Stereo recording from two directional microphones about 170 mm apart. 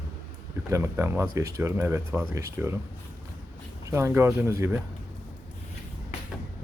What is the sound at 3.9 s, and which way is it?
Speech, 15° right (ahead or behind).